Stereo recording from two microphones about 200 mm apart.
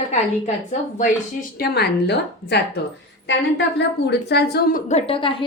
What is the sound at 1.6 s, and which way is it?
A woman's voice, 55° left (ahead or behind).